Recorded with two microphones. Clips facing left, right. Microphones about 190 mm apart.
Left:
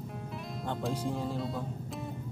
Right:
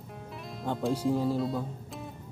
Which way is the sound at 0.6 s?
5° right (ahead or behind).